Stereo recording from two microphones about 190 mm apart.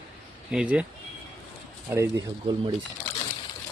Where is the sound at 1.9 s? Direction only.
15° right (ahead or behind).